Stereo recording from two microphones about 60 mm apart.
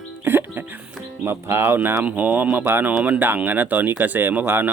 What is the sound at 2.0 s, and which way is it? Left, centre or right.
Speech, right.